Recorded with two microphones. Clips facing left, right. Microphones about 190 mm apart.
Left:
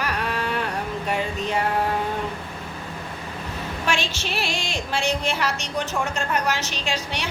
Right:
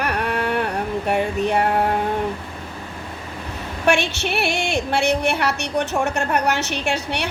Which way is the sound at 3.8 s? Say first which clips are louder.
Right 8 dB; 65° right (ahead or behind).